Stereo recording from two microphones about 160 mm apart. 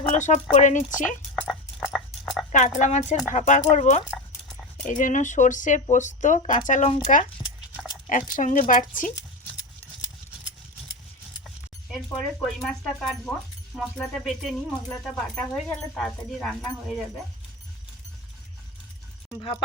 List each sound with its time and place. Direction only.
0.1 s speech: 50° left (ahead or behind)
1.8 s frog: centre (ahead or behind)
2.5 s speech: 50° left (ahead or behind)
11.4 s speech: centre (ahead or behind)
19.4 s speech: 30° left (ahead or behind)